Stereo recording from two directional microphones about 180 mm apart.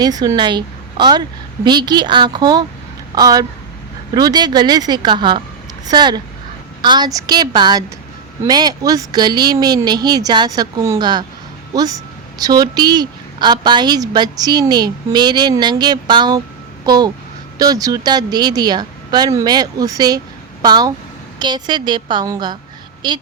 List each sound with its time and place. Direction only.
0.0 s a woman's voice: 20° right (ahead or behind)